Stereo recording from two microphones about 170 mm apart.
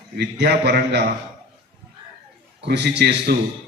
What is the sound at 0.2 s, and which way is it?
Speech, 75° right (ahead or behind).